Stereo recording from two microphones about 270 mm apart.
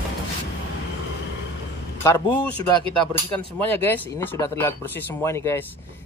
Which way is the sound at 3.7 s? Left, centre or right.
Centre.